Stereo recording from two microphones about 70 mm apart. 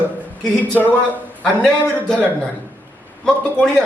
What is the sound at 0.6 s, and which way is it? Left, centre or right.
Speech, left.